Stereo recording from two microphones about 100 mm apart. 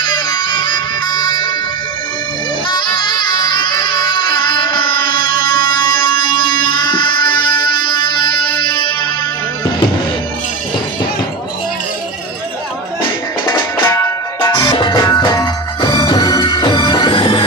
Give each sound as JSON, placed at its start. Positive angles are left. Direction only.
{"t": 0.0, "sound": "music", "side_deg": 45}
{"t": 2.7, "sound": "music", "side_deg": 50}
{"t": 13.8, "sound": "music", "side_deg": 30}
{"t": 14.5, "sound": "music", "side_deg": 50}
{"t": 16.7, "sound": "music", "side_deg": 55}